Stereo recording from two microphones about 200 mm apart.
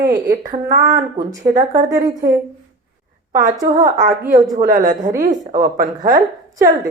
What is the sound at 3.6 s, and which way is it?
Speech, 15° right (ahead or behind).